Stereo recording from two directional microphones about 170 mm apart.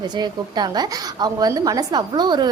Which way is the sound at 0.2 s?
25° right (ahead or behind).